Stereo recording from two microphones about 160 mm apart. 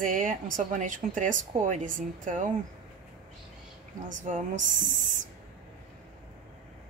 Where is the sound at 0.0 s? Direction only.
60° right (ahead or behind).